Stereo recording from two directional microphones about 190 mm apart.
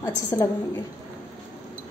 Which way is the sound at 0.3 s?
15° left (ahead or behind).